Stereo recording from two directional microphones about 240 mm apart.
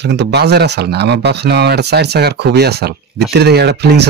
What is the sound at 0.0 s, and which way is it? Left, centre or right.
Speech, right.